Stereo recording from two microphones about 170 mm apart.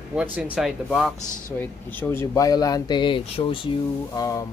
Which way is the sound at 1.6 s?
15° left (ahead or behind).